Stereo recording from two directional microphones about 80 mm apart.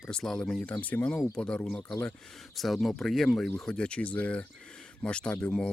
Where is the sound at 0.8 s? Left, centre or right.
Centre.